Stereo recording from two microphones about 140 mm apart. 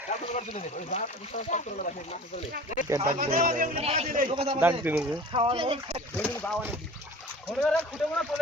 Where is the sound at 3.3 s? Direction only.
75° right (ahead or behind).